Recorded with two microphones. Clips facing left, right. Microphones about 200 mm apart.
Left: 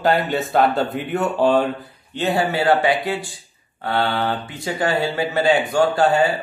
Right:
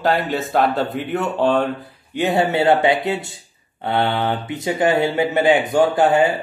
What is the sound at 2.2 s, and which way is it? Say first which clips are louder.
Speech: right 2 dB; 20° right (ahead or behind).